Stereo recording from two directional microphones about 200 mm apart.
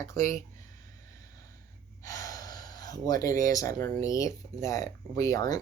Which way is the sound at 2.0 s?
15° left (ahead or behind).